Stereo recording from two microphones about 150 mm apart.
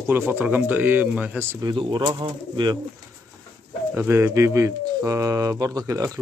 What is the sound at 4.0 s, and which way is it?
Speech, 15° right (ahead or behind).